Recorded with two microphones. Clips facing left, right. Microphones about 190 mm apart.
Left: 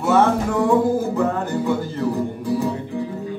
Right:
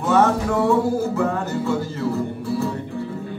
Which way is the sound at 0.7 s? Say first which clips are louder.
Left 2 dB; 15° left (ahead or behind).